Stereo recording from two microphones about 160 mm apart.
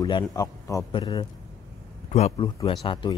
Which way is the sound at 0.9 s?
30° left (ahead or behind).